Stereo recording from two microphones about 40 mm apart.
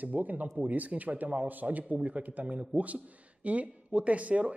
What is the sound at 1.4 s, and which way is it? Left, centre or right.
Speech, right.